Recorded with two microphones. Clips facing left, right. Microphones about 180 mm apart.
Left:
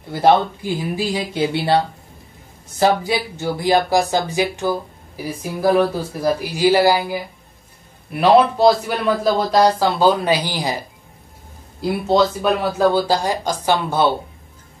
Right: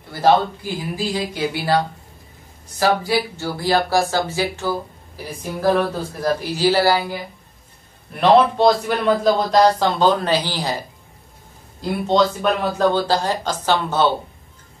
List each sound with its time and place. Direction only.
0.9 s speech: 20° left (ahead or behind)
2.8 s speech: 20° left (ahead or behind)